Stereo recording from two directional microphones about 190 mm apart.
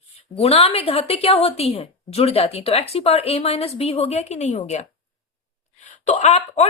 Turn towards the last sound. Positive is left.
turn(degrees=35)  # may be behind; listen again after turning